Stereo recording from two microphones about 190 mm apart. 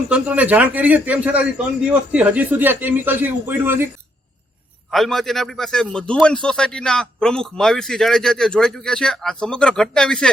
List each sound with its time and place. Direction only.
0.1 s speech: 5° right (ahead or behind)
4.9 s a man's voice: centre (ahead or behind)